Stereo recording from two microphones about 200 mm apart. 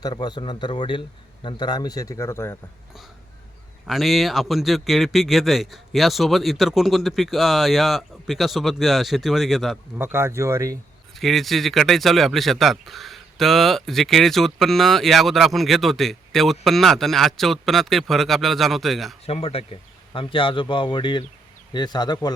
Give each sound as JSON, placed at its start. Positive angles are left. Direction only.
{"t": 0.0, "sound": "a man's voice", "side_deg": 20}
{"t": 3.8, "sound": "a man's voice", "side_deg": 0}
{"t": 10.0, "sound": "speech", "side_deg": -10}
{"t": 11.1, "sound": "a man's voice", "side_deg": 0}
{"t": 19.2, "sound": "a man's voice", "side_deg": 30}